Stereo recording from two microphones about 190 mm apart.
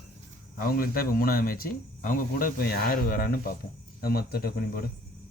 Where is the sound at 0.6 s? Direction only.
50° left (ahead or behind).